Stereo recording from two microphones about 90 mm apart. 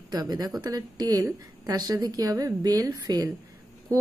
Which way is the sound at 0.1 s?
45° right (ahead or behind).